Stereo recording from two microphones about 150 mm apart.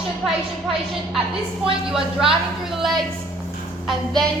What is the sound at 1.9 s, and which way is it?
A woman's voice, 5° right (ahead or behind).